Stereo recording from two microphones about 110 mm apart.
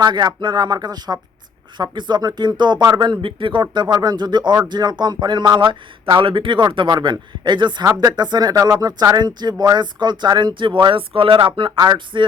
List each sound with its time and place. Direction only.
0.0 s speech: 40° right (ahead or behind)